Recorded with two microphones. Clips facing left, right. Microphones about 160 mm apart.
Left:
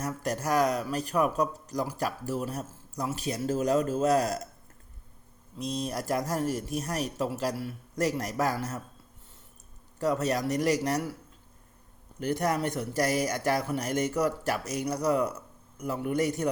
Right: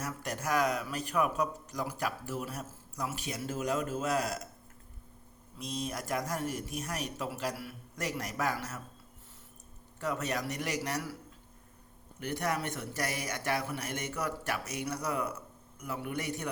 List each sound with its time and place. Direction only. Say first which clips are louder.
0.0 s speech: left 6 dB; 35° left (ahead or behind)
5.5 s speech: left 5 dB; 35° left (ahead or behind)
10.0 s speech: left 7 dB; 35° left (ahead or behind)
12.2 s speech: left 6 dB; 35° left (ahead or behind)